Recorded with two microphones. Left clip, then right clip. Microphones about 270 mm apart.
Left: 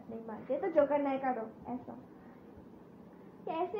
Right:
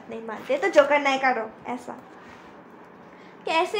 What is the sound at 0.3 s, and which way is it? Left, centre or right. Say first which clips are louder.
A woman's voice: right 11 dB; right.